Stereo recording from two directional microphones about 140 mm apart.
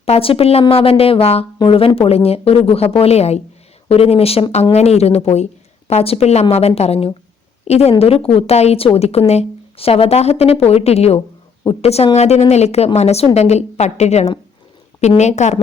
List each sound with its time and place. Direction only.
0.0 s a woman's voice: 45° left (ahead or behind)